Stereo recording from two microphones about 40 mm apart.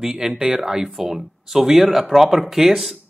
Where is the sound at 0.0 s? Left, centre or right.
Centre.